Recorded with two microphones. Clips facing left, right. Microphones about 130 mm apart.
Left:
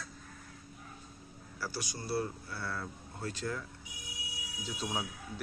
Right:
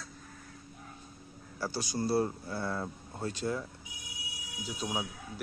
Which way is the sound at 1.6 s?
30° right (ahead or behind).